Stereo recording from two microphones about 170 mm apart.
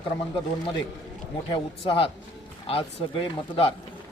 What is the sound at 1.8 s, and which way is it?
Speech, 30° left (ahead or behind).